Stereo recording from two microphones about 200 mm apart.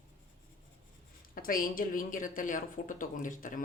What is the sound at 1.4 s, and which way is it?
Speech, 45° left (ahead or behind).